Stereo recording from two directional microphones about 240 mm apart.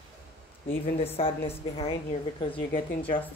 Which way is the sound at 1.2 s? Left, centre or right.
Left.